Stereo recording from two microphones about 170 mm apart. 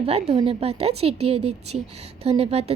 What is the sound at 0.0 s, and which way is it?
Speech, 35° right (ahead or behind).